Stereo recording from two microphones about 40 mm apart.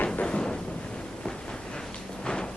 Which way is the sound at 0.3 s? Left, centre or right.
Left.